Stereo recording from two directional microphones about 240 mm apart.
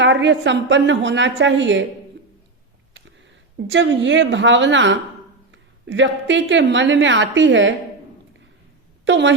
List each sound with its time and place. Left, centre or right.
0.0 s a woman's voice: right
3.2 s a woman's voice: right
9.0 s speech: right